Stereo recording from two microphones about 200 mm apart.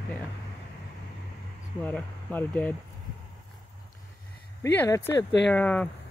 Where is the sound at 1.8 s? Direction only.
5° left (ahead or behind).